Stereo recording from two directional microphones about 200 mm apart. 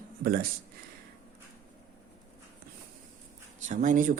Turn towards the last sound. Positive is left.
turn(degrees=-40)  # may be behind; listen again after turning